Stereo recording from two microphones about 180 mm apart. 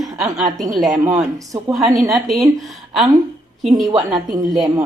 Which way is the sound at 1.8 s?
20° right (ahead or behind).